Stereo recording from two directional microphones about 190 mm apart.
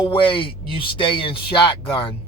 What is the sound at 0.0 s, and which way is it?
Speech, 25° left (ahead or behind).